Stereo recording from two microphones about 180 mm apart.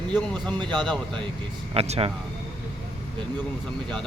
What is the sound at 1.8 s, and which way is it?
Speech, 35° right (ahead or behind).